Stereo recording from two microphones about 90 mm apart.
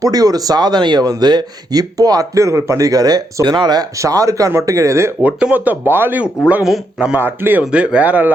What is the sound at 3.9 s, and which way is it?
Speech, 35° right (ahead or behind).